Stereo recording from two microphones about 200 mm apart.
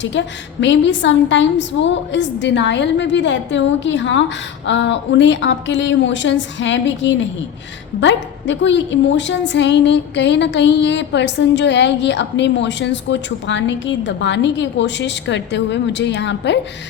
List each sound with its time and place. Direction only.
0.0 s a woman's voice: 65° left (ahead or behind)